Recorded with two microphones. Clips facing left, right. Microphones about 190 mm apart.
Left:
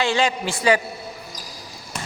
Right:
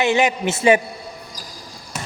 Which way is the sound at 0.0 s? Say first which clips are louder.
Right 3 dB; 20° right (ahead or behind).